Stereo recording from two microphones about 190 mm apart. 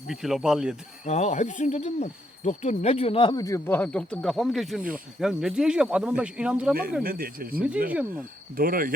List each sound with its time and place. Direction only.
0.1 s speech: centre (ahead or behind)
1.0 s hoot: 35° left (ahead or behind); by 4.8 s centre (ahead or behind)
5.2 s speech: 5° right (ahead or behind)
7.0 s speech: 50° right (ahead or behind)